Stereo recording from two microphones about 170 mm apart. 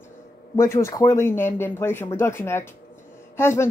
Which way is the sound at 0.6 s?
15° left (ahead or behind).